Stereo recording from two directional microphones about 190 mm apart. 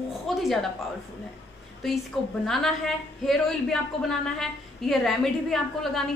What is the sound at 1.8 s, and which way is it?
A woman's voice, centre (ahead or behind).